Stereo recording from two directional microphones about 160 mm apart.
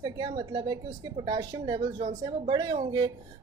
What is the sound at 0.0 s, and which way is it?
Speech, 25° right (ahead or behind).